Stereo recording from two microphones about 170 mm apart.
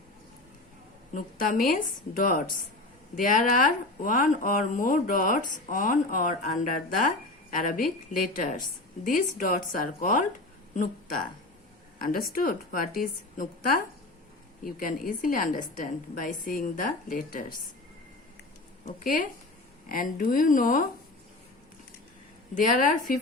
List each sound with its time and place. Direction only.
1.1 s speech: 55° left (ahead or behind)
18.9 s speech: 50° left (ahead or behind)
22.5 s speech: 50° left (ahead or behind)